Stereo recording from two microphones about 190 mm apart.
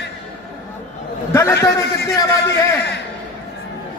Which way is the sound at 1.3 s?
15° left (ahead or behind).